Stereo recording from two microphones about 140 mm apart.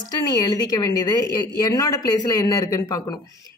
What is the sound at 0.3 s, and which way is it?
A woman's voice, 25° left (ahead or behind).